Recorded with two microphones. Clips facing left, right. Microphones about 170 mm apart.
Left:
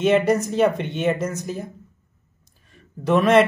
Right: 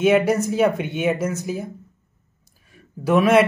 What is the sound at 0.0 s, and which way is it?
Speech, 5° right (ahead or behind).